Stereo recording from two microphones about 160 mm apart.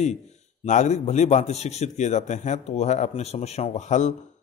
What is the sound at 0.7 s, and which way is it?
A man's voice, 45° left (ahead or behind).